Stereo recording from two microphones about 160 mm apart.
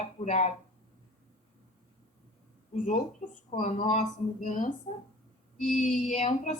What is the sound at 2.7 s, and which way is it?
A woman's voice, 50° left (ahead or behind).